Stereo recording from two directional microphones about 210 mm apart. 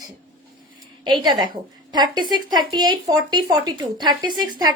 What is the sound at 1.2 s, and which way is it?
Speech, 20° right (ahead or behind).